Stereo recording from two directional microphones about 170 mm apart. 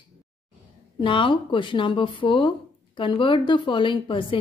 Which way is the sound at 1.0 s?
30° left (ahead or behind).